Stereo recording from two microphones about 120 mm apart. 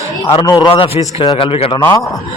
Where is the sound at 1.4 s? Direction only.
50° left (ahead or behind).